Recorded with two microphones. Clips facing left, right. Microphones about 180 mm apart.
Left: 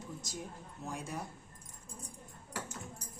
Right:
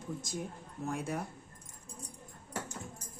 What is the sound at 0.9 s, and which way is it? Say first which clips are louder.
Speech: right 6 dB; 60° right (ahead or behind).